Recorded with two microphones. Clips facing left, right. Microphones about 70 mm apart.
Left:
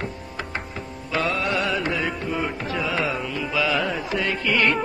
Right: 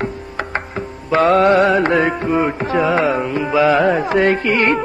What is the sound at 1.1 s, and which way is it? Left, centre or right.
Music, right.